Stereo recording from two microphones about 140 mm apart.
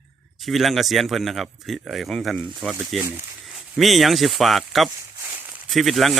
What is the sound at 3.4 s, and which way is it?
Speech, centre (ahead or behind).